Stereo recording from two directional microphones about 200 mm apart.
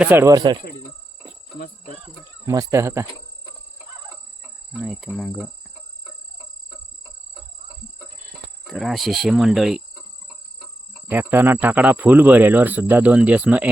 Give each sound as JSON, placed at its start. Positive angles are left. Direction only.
{"t": 0.0, "sound": "speech", "side_deg": -10}
{"t": 2.5, "sound": "speech", "side_deg": -15}
{"t": 4.8, "sound": "cricket", "side_deg": -5}
{"t": 8.6, "sound": "cricket", "side_deg": 0}
{"t": 11.1, "sound": "speech", "side_deg": -10}